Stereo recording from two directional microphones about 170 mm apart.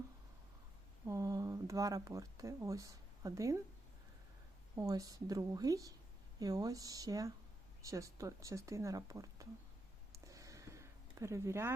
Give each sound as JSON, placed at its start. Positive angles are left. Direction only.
{"t": 1.0, "sound": "speech", "side_deg": -20}
{"t": 4.7, "sound": "speech", "side_deg": -20}
{"t": 10.2, "sound": "a sound", "side_deg": -20}